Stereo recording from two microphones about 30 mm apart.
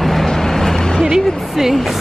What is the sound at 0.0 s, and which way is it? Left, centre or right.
Vehicle, centre.